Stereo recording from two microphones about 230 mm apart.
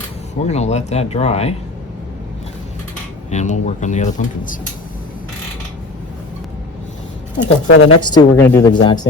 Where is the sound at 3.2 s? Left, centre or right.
Left.